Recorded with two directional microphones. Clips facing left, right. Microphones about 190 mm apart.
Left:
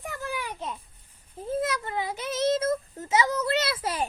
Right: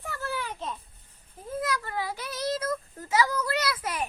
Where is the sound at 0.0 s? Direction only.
15° left (ahead or behind).